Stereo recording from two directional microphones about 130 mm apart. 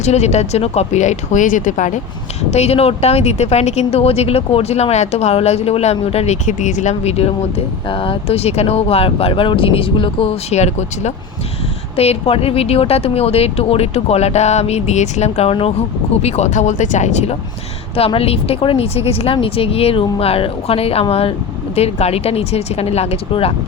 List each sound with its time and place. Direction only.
0.0 s speech: 60° left (ahead or behind)
2.5 s speech: 55° left (ahead or behind)
7.9 s speech: 45° left (ahead or behind)
10.5 s speech: 60° left (ahead or behind)
17.9 s speech: 45° left (ahead or behind)